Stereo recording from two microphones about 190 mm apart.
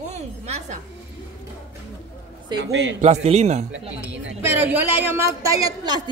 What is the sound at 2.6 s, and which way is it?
Speech, 70° right (ahead or behind).